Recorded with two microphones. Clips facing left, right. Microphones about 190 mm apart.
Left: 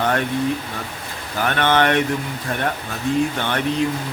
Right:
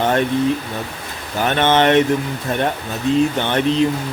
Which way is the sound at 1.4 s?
20° right (ahead or behind).